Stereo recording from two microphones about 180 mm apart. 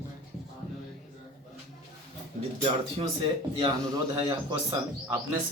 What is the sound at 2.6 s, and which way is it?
Speech, 30° right (ahead or behind).